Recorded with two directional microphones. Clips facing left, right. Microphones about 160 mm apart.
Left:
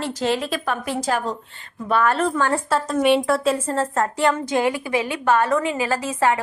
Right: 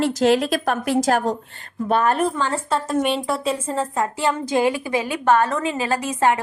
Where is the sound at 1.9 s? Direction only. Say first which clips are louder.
Right 1 dB; 20° right (ahead or behind).